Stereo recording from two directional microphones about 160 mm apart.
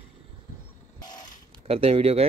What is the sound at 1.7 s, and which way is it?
Speech, 40° right (ahead or behind).